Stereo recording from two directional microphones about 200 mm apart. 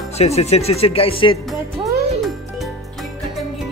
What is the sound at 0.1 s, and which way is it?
Speech, 30° left (ahead or behind).